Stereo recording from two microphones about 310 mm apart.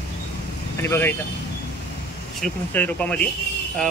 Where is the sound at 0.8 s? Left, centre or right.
Centre.